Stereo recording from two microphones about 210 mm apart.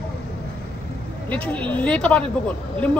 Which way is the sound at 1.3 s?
5° left (ahead or behind).